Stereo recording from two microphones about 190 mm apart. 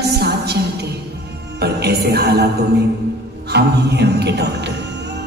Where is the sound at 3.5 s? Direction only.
60° right (ahead or behind).